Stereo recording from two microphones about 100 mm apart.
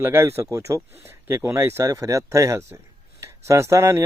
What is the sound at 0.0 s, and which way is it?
Speech, 25° right (ahead or behind).